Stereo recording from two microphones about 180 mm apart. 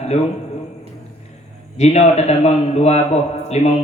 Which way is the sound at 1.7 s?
35° left (ahead or behind).